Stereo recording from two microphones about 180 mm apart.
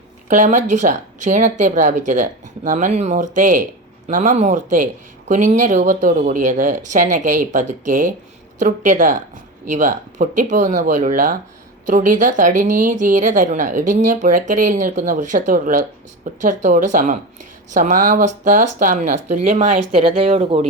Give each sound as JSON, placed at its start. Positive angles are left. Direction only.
{"t": 0.3, "sound": "a woman's voice", "side_deg": -45}